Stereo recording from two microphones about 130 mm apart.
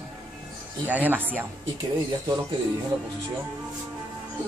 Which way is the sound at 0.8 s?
15° right (ahead or behind).